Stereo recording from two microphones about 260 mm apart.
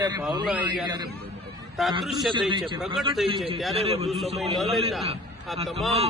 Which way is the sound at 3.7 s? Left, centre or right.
Right.